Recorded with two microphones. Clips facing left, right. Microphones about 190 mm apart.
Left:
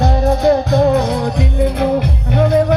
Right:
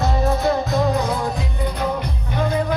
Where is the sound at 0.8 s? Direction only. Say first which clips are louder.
Left 7 dB; 70° left (ahead or behind).